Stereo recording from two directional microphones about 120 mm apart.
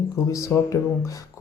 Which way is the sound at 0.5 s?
20° left (ahead or behind).